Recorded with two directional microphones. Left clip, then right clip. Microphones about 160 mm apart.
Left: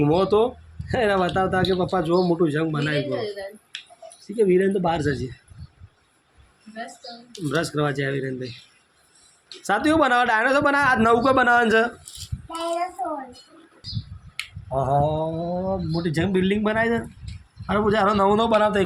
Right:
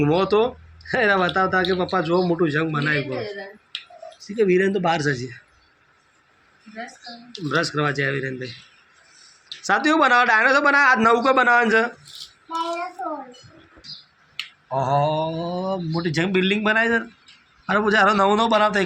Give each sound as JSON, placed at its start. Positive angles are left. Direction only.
{"t": 0.0, "sound": "speech", "side_deg": 10}
{"t": 4.3, "sound": "speech", "side_deg": 10}
{"t": 7.3, "sound": "speech", "side_deg": 15}
{"t": 9.6, "sound": "speech", "side_deg": 15}
{"t": 14.8, "sound": "a man's voice", "side_deg": 25}